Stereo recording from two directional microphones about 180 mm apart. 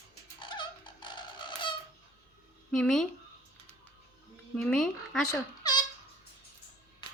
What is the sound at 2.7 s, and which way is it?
Speech, 5° left (ahead or behind).